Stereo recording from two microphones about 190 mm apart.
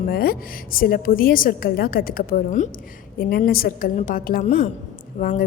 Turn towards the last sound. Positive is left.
turn(degrees=40)  # may be behind; listen again after turning